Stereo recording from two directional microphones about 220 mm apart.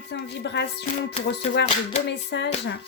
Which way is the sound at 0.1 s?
50° left (ahead or behind).